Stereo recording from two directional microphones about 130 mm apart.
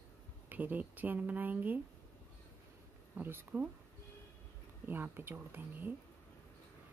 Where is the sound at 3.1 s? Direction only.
15° right (ahead or behind).